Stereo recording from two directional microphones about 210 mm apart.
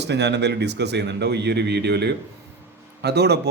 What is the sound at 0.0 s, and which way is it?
Speech, 55° right (ahead or behind).